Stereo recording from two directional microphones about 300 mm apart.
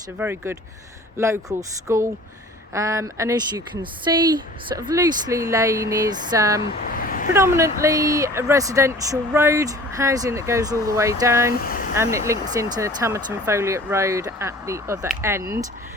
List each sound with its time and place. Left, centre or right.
0.2 s speech: centre
6.8 s a sound: left
7.3 s speech: centre
11.5 s speech: left
11.9 s speech: centre